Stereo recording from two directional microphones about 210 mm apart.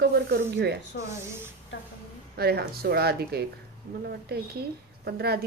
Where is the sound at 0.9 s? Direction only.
55° left (ahead or behind).